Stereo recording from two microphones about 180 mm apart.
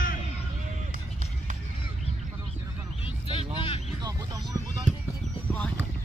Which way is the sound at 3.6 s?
30° left (ahead or behind).